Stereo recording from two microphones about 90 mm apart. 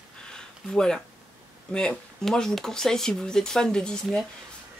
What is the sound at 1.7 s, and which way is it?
Speech, 10° left (ahead or behind).